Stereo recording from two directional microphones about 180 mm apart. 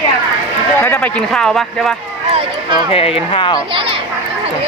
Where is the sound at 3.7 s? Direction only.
30° right (ahead or behind).